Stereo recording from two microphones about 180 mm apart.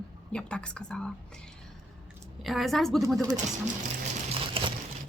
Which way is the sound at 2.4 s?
Centre (ahead or behind).